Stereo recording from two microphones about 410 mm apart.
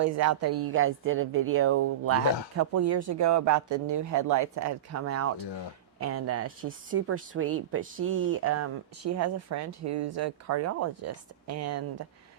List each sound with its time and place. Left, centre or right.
0.0 s speech: right